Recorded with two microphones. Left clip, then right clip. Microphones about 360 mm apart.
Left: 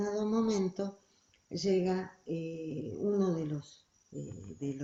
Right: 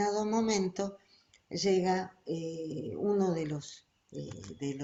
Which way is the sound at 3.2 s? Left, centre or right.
Right.